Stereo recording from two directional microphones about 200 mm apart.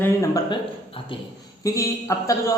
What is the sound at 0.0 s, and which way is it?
Speech, 15° left (ahead or behind).